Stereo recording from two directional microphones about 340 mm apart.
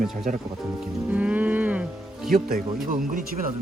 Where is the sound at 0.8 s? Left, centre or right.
Centre.